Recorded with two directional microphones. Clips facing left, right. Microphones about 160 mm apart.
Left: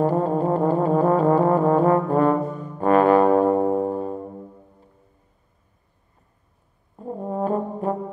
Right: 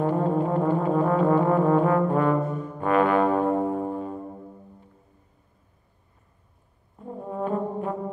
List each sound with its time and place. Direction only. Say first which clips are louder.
0.0 s brass instrument: left 3 dB; 35° left (ahead or behind)
7.0 s brass instrument: left 5 dB; 35° left (ahead or behind)